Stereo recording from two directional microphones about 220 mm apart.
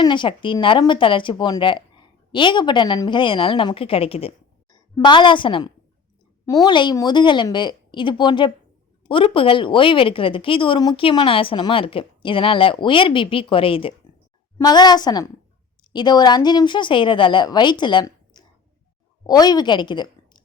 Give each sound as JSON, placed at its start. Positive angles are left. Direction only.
{"t": 0.0, "sound": "a woman's voice", "side_deg": 20}